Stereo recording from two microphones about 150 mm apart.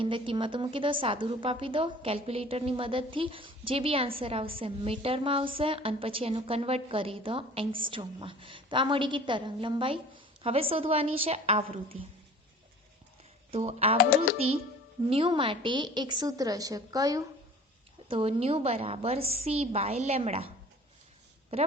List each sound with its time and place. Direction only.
0.0 s a woman's voice: 35° right (ahead or behind)
13.5 s a woman's voice: 45° right (ahead or behind); by 17.2 s 25° right (ahead or behind)
18.1 s a woman's voice: 40° right (ahead or behind)
21.5 s a woman's voice: 40° right (ahead or behind)